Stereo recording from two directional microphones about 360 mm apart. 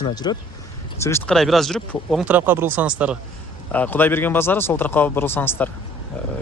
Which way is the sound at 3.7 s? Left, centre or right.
Centre.